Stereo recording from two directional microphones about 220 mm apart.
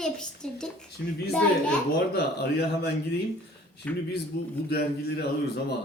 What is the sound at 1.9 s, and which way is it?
Speech, 50° left (ahead or behind).